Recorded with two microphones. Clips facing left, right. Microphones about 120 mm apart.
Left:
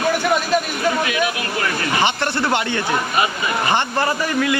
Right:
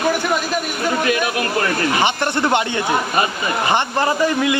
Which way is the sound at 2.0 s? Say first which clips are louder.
Right 2 dB; 15° right (ahead or behind).